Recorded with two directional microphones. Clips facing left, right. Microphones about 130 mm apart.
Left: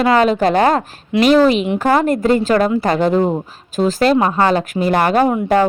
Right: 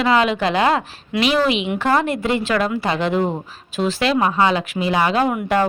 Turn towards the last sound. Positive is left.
turn(degrees=30)  # may be behind; listen again after turning